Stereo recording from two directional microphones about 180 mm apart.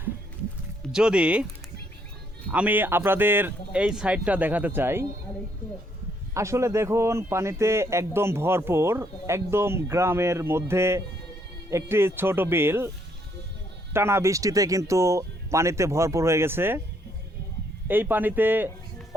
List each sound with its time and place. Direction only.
0.9 s speech: 5° right (ahead or behind)
2.5 s a man's voice: 10° right (ahead or behind)
6.3 s a man's voice: 15° right (ahead or behind)
13.9 s a man's voice: 15° right (ahead or behind)
17.8 s a man's voice: 10° right (ahead or behind)